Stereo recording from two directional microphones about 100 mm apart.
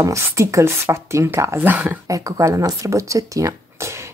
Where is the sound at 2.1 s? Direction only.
35° right (ahead or behind).